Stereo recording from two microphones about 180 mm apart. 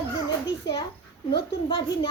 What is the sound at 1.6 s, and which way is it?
Speech, 25° left (ahead or behind).